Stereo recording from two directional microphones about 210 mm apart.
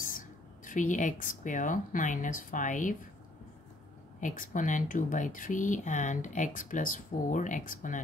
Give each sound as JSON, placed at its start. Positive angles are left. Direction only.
{"t": 0.0, "sound": "speech", "side_deg": 40}
{"t": 4.2, "sound": "speech", "side_deg": 40}